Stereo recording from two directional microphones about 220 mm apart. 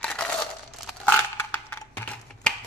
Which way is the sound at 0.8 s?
5° left (ahead or behind).